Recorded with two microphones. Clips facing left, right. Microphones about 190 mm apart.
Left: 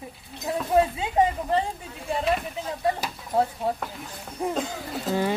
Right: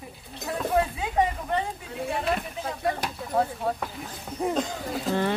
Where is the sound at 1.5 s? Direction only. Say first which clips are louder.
Left 3 dB; 30° left (ahead or behind).